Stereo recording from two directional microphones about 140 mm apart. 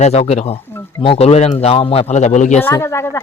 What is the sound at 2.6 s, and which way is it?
Speech, 20° left (ahead or behind).